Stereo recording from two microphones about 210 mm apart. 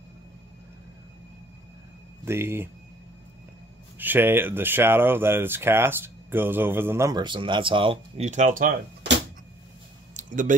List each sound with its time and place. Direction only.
2.2 s speech: 10° right (ahead or behind)
4.0 s speech: 10° right (ahead or behind); by 8.7 s 40° right (ahead or behind)
10.1 s a sound: 40° right (ahead or behind)